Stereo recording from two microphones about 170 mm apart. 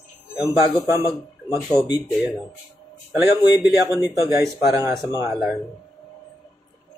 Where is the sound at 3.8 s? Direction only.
20° left (ahead or behind).